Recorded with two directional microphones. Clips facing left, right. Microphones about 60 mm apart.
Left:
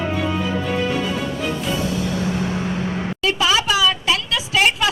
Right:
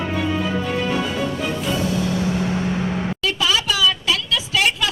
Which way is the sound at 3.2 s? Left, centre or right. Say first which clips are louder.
Left 4 dB; left.